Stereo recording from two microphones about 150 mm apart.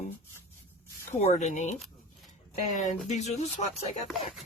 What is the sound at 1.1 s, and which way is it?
Speech, 50° left (ahead or behind).